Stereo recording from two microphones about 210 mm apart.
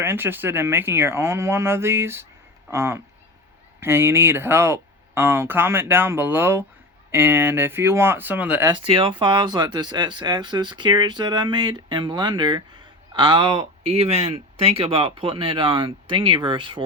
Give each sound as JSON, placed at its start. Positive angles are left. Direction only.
{"t": 0.0, "sound": "speech", "side_deg": -10}
{"t": 8.7, "sound": "speech", "side_deg": -25}